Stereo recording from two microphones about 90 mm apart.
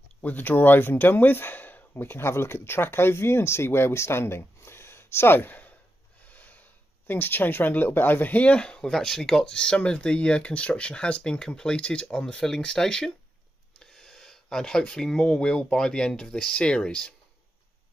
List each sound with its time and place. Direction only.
0.2 s speech: 20° left (ahead or behind)
6.2 s snort: 20° left (ahead or behind)
7.1 s speech: 20° left (ahead or behind)